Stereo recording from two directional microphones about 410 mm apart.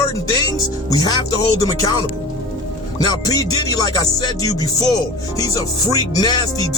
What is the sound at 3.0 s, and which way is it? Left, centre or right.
Music, centre.